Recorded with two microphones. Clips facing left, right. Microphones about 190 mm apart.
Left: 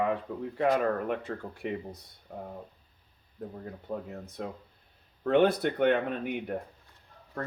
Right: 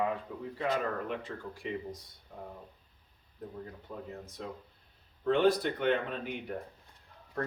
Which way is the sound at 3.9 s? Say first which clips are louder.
Left 8 dB; 55° left (ahead or behind).